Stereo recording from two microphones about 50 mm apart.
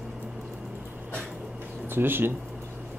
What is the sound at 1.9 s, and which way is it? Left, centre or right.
Speech, right.